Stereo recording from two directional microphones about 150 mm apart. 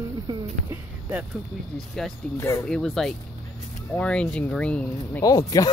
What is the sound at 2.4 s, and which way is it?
Speech, 15° left (ahead or behind).